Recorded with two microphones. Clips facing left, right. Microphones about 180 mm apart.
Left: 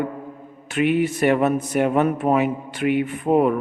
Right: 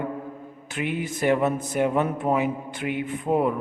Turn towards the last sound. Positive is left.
turn(degrees=70)  # may be behind; listen again after turning